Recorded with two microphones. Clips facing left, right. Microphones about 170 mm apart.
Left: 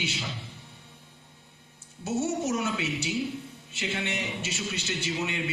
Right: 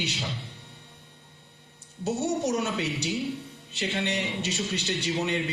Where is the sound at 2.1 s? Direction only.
35° right (ahead or behind).